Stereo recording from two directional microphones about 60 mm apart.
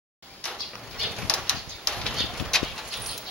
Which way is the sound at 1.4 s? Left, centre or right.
Centre.